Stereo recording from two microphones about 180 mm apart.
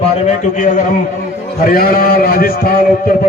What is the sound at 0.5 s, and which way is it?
A man's voice, 45° left (ahead or behind).